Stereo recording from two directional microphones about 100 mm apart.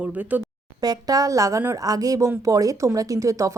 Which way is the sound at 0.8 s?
40° right (ahead or behind).